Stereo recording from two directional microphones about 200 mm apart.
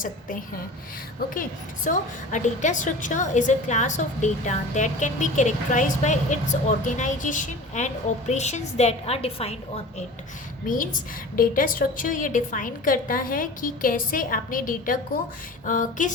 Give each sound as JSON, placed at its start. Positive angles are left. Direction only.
{"t": 1.3, "sound": "a woman's voice", "side_deg": 40}
{"t": 11.3, "sound": "a woman's voice", "side_deg": 45}